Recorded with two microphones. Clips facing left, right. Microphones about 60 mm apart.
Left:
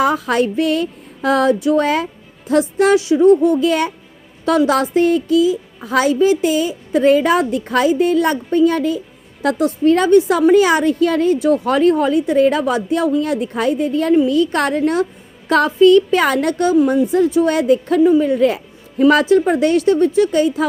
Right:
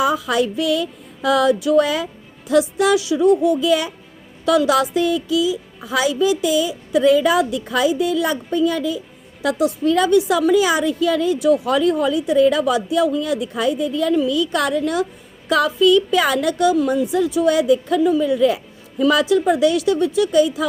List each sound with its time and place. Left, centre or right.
0.0 s a woman's voice: left